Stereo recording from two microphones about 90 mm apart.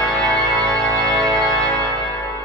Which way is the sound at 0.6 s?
40° right (ahead or behind).